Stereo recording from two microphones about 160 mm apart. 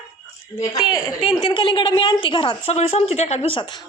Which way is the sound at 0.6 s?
25° left (ahead or behind).